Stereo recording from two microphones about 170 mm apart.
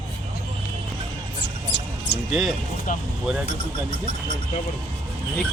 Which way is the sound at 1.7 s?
90° left.